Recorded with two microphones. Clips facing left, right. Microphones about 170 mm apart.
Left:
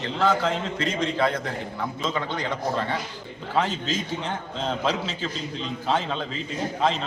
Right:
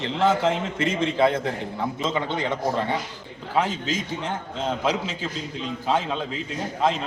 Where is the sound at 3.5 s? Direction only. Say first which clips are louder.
Right 1 dB; 10° right (ahead or behind).